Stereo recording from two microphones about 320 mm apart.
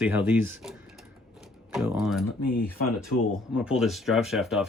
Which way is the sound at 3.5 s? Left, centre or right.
Centre.